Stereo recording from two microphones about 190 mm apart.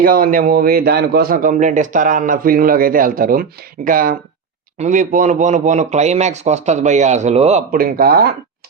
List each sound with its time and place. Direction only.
0.0 s a man's voice: 50° right (ahead or behind)
7.7 s a man's voice: 50° right (ahead or behind)